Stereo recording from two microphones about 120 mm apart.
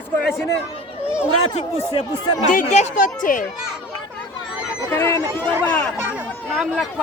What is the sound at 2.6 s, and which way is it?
Speech, 80° left.